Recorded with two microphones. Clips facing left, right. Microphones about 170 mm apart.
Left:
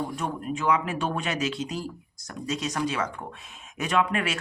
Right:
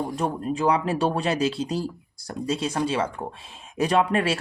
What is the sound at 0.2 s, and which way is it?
Speech, 35° right (ahead or behind).